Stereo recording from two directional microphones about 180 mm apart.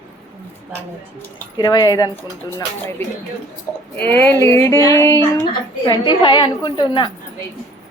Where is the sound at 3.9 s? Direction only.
10° left (ahead or behind).